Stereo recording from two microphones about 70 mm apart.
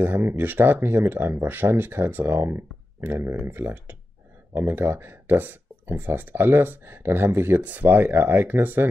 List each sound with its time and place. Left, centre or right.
0.0 s speech: right